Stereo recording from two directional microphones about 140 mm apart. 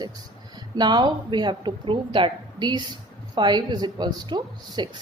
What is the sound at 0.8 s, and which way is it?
A woman's voice, 30° right (ahead or behind).